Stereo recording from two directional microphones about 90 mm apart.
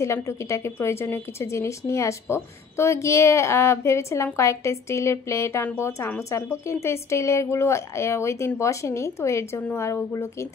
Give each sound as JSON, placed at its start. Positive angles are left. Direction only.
{"t": 0.0, "sound": "a woman's voice", "side_deg": 30}